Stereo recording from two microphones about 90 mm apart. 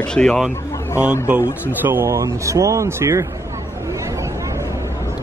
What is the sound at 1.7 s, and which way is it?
Speech, 20° right (ahead or behind).